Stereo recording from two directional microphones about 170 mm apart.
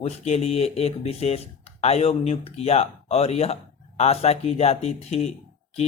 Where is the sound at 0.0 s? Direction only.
40° left (ahead or behind).